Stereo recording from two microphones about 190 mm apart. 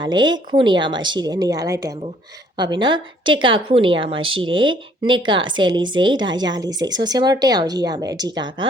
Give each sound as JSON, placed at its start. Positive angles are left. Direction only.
{"t": 0.0, "sound": "a woman's voice", "side_deg": -25}